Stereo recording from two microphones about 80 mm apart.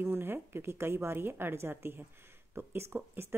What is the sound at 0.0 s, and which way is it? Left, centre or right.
A woman's voice, right.